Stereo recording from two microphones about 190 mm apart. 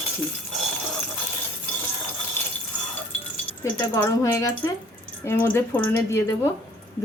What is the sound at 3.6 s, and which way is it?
Speech, 15° left (ahead or behind).